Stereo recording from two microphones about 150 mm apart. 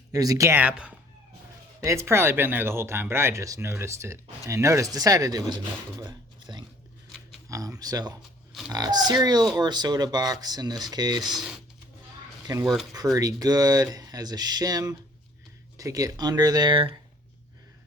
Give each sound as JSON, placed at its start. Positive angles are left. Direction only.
{"t": 0.1, "sound": "speech", "side_deg": -25}
{"t": 1.8, "sound": "speech", "side_deg": -20}
{"t": 11.3, "sound": "speech", "side_deg": -5}
{"t": 12.6, "sound": "speech", "side_deg": 0}
{"t": 13.1, "sound": "speech", "side_deg": -25}